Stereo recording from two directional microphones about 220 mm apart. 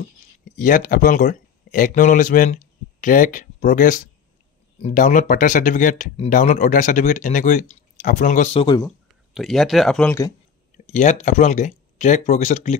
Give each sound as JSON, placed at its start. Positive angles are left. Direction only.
{"t": 0.6, "sound": "speech", "side_deg": 35}
{"t": 8.8, "sound": "speech", "side_deg": 0}
{"t": 10.9, "sound": "speech", "side_deg": 35}